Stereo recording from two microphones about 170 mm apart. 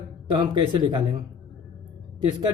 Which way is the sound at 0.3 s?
25° right (ahead or behind).